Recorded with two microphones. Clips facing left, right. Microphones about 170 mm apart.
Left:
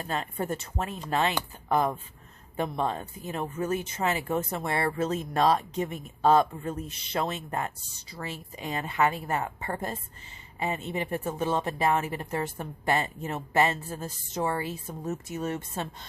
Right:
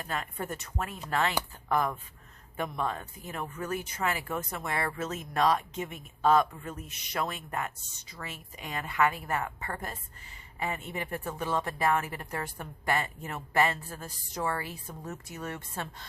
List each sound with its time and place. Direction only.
0.0 s speech: 25° left (ahead or behind)